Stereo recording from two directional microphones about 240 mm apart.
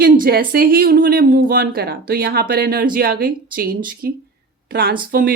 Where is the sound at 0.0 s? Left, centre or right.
Right.